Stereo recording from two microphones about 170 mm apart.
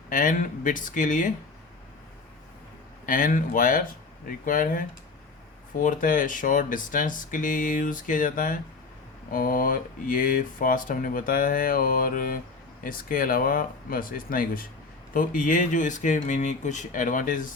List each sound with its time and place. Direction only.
0.1 s speech: 50° left (ahead or behind)
3.1 s speech: 50° left (ahead or behind)